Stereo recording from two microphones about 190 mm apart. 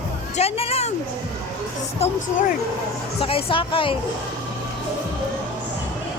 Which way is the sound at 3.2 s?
30° left (ahead or behind).